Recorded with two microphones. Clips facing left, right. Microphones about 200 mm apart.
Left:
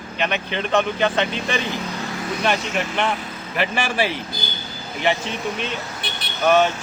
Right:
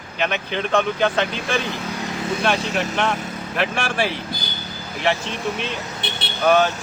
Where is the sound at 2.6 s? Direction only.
35° right (ahead or behind).